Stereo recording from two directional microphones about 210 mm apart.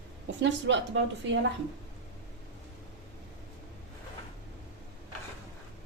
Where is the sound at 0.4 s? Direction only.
55° right (ahead or behind).